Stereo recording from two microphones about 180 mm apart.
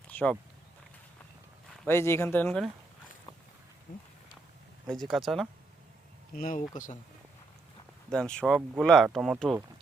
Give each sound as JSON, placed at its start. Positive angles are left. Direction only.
{"t": 0.1, "sound": "a sound", "side_deg": 10}
{"t": 1.9, "sound": "speech", "side_deg": 15}
{"t": 4.9, "sound": "speech", "side_deg": 0}
{"t": 6.3, "sound": "speech", "side_deg": 50}
{"t": 8.1, "sound": "speech", "side_deg": 5}